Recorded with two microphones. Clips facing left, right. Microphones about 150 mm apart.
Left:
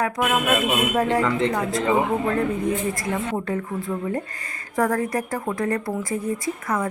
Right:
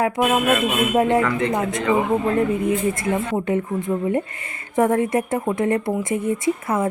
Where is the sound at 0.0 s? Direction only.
25° right (ahead or behind).